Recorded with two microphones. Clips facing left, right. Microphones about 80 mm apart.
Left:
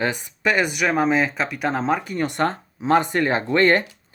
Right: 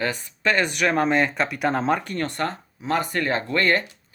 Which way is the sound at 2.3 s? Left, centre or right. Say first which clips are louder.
Left 5 dB; left.